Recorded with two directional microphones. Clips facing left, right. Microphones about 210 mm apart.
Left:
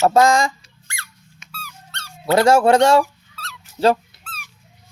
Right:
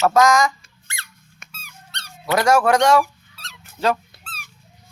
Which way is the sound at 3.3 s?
15° right (ahead or behind).